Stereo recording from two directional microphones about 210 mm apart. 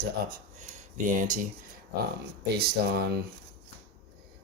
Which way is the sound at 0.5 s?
35° right (ahead or behind).